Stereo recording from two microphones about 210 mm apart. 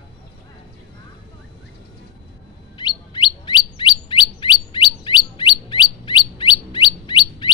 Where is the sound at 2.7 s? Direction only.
20° left (ahead or behind).